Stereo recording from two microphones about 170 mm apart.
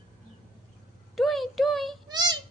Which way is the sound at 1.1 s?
Centre (ahead or behind).